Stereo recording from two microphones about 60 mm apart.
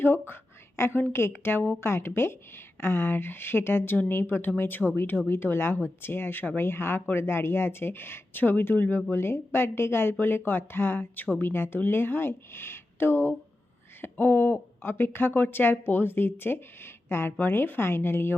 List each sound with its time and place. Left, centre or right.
0.0 s a woman's voice: left